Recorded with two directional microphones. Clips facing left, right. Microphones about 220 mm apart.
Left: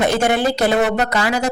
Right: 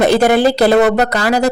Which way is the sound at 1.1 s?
35° right (ahead or behind).